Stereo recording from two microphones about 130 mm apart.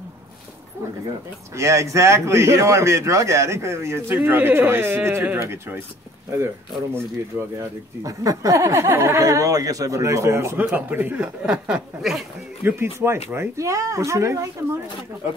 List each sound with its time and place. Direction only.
1.6 s a man's voice: 20° right (ahead or behind); by 12.3 s centre (ahead or behind)
12.6 s a man's voice: 20° right (ahead or behind)